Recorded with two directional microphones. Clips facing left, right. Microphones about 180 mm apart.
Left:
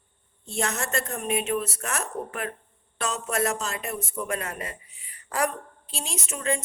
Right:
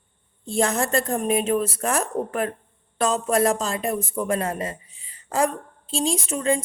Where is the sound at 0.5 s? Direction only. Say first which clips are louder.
Right 7 dB; 30° right (ahead or behind).